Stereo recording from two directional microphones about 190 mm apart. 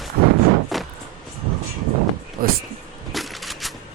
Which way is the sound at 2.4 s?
50° right (ahead or behind).